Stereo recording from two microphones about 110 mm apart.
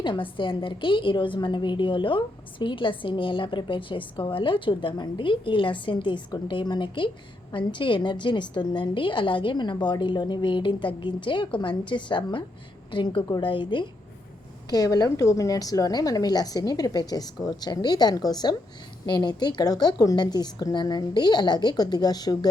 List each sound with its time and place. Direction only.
0.0 s a woman's voice: 50° left (ahead or behind)
14.7 s a woman's voice: 35° left (ahead or behind)